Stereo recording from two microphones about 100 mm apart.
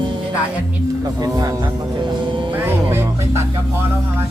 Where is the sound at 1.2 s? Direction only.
40° right (ahead or behind).